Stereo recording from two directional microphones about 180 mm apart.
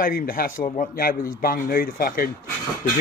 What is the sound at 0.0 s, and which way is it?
A man's voice, 55° left (ahead or behind).